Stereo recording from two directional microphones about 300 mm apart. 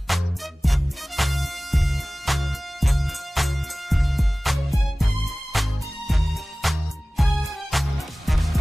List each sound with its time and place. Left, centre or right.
0.1 s music: centre